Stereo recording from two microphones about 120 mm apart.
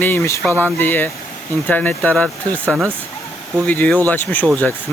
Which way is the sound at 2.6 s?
15° right (ahead or behind).